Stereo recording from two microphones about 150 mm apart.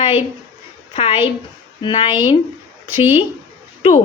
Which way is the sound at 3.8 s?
40° left (ahead or behind).